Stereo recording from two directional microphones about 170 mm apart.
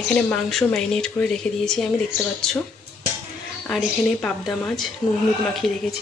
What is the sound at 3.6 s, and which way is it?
Speech, 5° left (ahead or behind).